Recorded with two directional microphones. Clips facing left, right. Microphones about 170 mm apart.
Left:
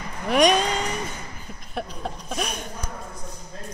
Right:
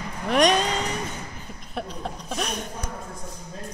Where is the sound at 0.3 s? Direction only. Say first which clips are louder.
Left 1 dB; 5° left (ahead or behind).